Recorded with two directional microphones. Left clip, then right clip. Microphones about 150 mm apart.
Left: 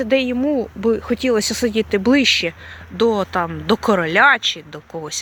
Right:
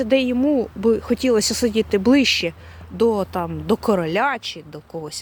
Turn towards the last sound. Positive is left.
turn(degrees=-20)  # may be behind; listen again after turning